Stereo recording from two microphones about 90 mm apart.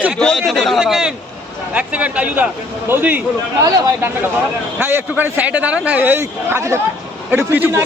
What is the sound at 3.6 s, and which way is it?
Speech, 45° right (ahead or behind).